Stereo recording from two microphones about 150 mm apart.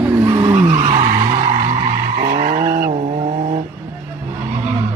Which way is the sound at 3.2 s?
50° right (ahead or behind).